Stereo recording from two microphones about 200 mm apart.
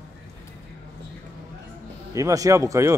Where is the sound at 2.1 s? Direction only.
15° right (ahead or behind).